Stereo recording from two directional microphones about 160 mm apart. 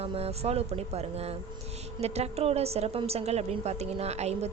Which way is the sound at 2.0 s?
40° right (ahead or behind).